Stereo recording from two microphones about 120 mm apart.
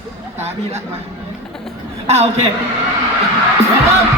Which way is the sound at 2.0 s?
65° right (ahead or behind).